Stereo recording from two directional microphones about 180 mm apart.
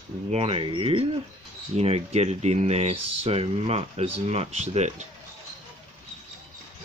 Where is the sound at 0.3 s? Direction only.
35° right (ahead or behind).